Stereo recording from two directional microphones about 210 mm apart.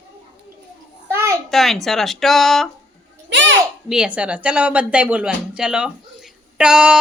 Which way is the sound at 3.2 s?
60° right (ahead or behind).